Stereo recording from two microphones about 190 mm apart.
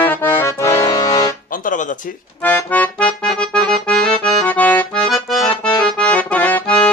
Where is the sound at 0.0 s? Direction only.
10° left (ahead or behind).